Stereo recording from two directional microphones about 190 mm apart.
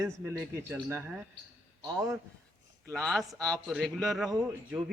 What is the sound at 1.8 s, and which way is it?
Speech, 20° right (ahead or behind).